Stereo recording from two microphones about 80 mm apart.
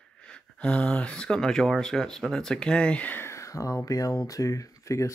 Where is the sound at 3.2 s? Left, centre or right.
Left.